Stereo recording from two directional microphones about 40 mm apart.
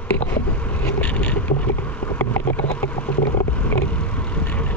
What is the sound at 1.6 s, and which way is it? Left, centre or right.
Vehicle, left.